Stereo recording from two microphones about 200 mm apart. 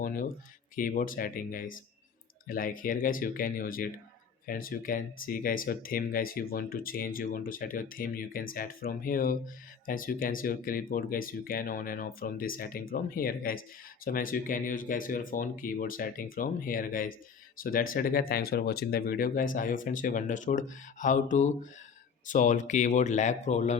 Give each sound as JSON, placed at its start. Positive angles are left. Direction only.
{"t": 0.0, "sound": "speech", "side_deg": 45}